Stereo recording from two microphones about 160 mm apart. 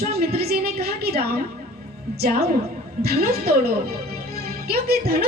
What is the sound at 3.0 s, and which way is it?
Speech, 75° right (ahead or behind).